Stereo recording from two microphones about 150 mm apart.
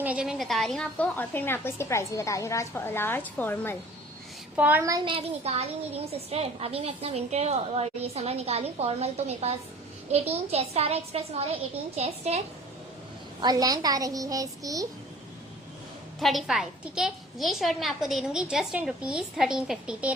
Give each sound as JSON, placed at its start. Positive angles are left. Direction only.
{"t": 0.0, "sound": "a woman's voice", "side_deg": -5}
{"t": 4.5, "sound": "a woman's voice", "side_deg": -10}
{"t": 4.8, "sound": "a woman's voice", "side_deg": -25}
{"t": 5.1, "sound": "a child's voice", "side_deg": -45}
{"t": 13.4, "sound": "a woman's voice", "side_deg": -25}
{"t": 16.2, "sound": "a woman's voice", "side_deg": 0}